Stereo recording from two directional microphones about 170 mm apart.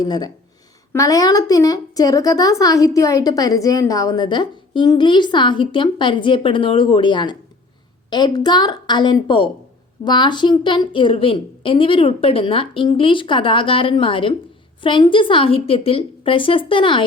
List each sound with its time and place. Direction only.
0.0 s a woman's voice: 25° left (ahead or behind)